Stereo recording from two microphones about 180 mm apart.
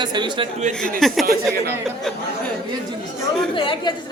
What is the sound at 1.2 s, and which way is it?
Speech, 60° right (ahead or behind).